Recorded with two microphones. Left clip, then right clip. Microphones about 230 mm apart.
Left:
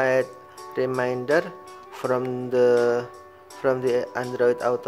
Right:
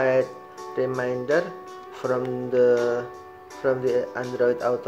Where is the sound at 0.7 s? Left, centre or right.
Centre.